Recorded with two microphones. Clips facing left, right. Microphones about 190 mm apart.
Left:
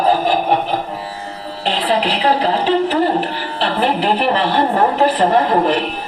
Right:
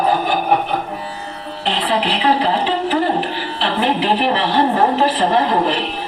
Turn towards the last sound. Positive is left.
turn(degrees=45)  # may be behind; listen again after turning